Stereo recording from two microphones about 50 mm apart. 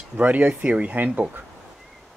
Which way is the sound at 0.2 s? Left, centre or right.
Right.